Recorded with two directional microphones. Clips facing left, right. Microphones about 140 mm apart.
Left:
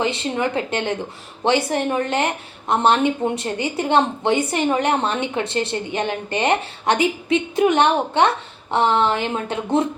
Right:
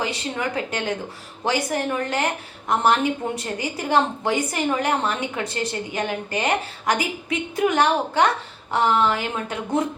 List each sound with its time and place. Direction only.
0.0 s a woman's voice: 25° left (ahead or behind)